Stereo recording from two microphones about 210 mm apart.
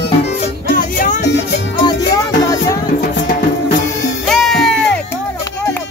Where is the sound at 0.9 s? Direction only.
40° left (ahead or behind).